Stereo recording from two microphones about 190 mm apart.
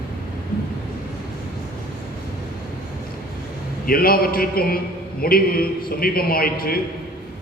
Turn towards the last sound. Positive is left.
turn(degrees=50)  # may be behind; listen again after turning